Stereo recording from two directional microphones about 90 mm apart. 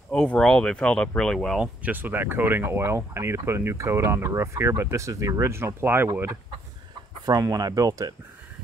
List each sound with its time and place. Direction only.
0.1 s speech: 5° left (ahead or behind)
1.6 s speech: 15° right (ahead or behind)
7.2 s speech: 40° right (ahead or behind)